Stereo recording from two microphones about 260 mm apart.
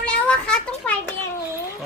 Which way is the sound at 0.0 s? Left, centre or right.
Centre.